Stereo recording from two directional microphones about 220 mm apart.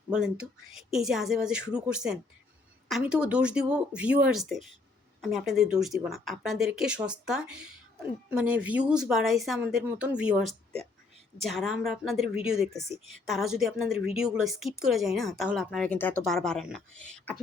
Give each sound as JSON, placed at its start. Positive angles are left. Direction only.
{"t": 0.1, "sound": "speech", "side_deg": -5}